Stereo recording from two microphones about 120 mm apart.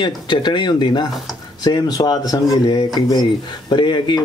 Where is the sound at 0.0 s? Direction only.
40° left (ahead or behind).